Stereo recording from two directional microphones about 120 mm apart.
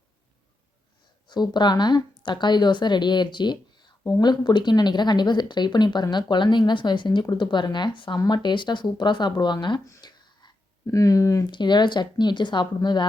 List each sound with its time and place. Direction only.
1.3 s speech: 40° left (ahead or behind)
9.8 s a sound: 30° left (ahead or behind)
11.5 s speech: 40° left (ahead or behind)